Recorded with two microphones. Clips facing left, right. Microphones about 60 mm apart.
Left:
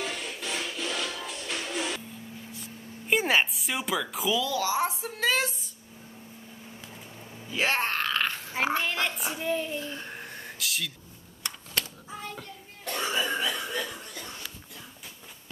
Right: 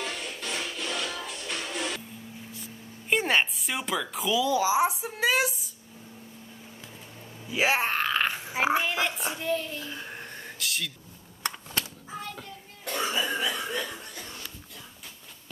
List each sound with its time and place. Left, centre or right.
0.0 s music: centre
3.1 s speech: centre
4.4 s speech: centre
7.4 s speech: centre
9.4 s a child's voice: centre
9.8 s a sound: centre
12.8 s throat clearing: centre
13.4 s a sound: right